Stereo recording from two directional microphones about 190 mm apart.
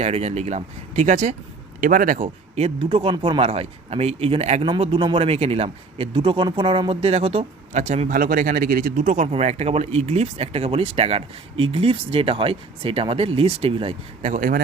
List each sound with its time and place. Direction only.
0.0 s speech: 35° right (ahead or behind)